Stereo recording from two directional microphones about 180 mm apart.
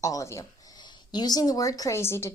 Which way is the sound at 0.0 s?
20° left (ahead or behind).